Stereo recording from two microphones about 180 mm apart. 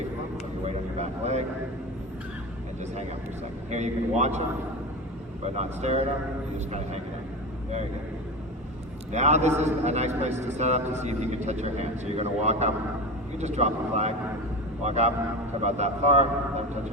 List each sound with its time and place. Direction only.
0.9 s vehicle: 40° right (ahead or behind)
3.7 s a man's voice: 40° right (ahead or behind)
5.5 s a man's voice: 35° right (ahead or behind)
9.1 s a man's voice: 40° right (ahead or behind)